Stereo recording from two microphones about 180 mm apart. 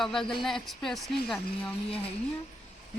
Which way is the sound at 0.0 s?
Centre (ahead or behind).